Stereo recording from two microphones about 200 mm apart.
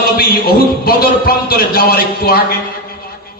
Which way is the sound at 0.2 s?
50° left (ahead or behind).